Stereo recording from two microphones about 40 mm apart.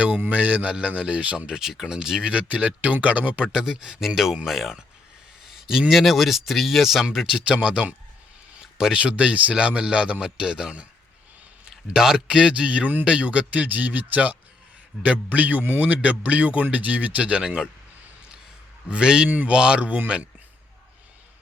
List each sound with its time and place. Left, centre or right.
0.3 s speech: right
1.5 s speech: centre
2.5 s speech: right
3.5 s speech: centre
5.5 s a sound: centre
5.9 s speech: centre
7.0 s speech: centre
7.5 s speech: right
11.9 s speech: centre; by 17.4 s right
18.9 s speech: right